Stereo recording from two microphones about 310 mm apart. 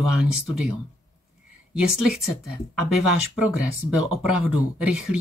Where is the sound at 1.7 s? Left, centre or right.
Centre.